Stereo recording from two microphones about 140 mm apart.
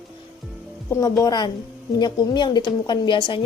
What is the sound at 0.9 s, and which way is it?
A woman's voice, 20° left (ahead or behind).